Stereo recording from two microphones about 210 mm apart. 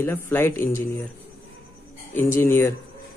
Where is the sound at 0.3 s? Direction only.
10° left (ahead or behind).